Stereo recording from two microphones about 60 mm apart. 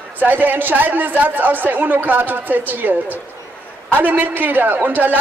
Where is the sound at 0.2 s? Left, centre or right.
Right.